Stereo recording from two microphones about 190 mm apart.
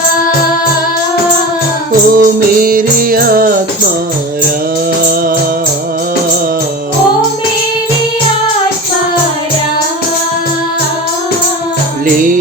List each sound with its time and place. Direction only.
2.1 s music: 50° right (ahead or behind)